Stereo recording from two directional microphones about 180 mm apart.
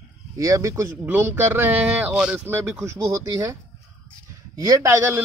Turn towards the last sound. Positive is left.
turn(degrees=-15)  # may be behind; listen again after turning